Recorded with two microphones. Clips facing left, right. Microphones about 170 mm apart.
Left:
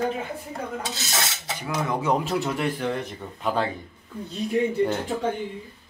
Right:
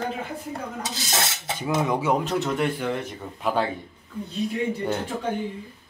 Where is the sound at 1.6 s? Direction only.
25° right (ahead or behind).